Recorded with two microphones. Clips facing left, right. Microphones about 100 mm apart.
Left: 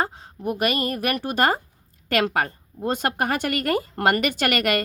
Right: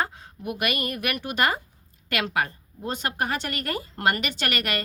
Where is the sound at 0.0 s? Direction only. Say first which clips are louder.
Left 3 dB; 30° left (ahead or behind).